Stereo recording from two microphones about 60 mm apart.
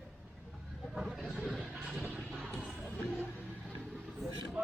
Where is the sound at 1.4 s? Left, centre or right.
Centre.